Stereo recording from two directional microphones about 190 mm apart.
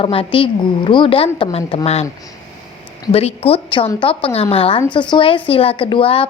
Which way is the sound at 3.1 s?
30° left (ahead or behind).